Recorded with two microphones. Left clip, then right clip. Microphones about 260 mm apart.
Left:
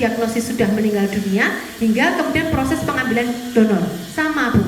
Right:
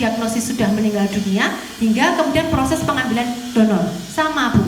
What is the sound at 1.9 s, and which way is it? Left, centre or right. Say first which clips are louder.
A woman's voice: right 2 dB; centre.